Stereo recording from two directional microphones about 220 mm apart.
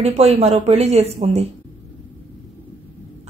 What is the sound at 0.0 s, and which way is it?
Speech, 30° right (ahead or behind).